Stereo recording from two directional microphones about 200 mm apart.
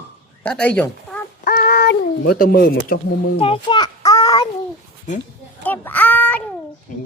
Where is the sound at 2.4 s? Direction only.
50° left (ahead or behind).